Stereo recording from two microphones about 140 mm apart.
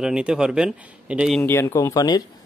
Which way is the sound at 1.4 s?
15° left (ahead or behind).